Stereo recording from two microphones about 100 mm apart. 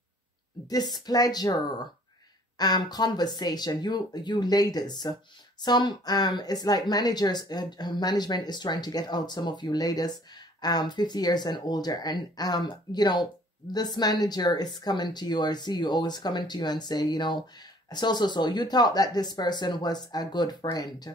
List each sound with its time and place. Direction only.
0.7 s a woman's voice: 40° left (ahead or behind)
2.6 s a woman's voice: 45° left (ahead or behind)